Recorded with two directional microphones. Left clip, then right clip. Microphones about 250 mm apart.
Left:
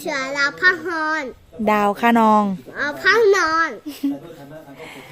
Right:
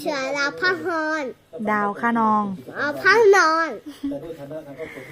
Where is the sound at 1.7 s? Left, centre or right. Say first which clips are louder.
Left 5 dB; left.